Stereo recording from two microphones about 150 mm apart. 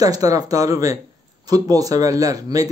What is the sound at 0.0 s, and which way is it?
A man's voice, 25° right (ahead or behind).